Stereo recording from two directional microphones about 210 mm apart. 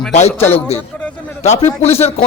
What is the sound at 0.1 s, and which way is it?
Speech, 30° left (ahead or behind).